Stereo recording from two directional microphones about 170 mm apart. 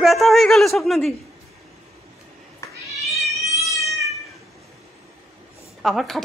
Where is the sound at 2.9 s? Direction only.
Centre (ahead or behind).